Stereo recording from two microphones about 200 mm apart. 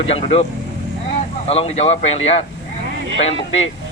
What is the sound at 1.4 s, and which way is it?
Speech, 30° left (ahead or behind).